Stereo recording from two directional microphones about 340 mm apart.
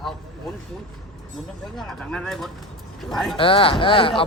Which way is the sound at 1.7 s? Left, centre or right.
Centre.